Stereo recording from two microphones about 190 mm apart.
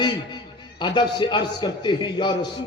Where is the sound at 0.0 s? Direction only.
25° left (ahead or behind).